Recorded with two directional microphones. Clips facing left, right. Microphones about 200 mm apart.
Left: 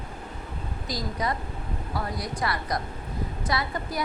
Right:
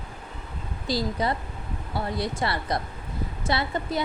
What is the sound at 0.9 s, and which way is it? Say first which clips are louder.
A woman's voice: right 4 dB; 30° right (ahead or behind).